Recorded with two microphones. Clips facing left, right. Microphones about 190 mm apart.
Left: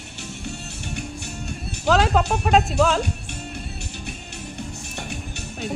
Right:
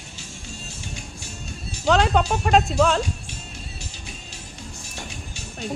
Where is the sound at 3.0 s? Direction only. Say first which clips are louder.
Left 3 dB; 60° left (ahead or behind).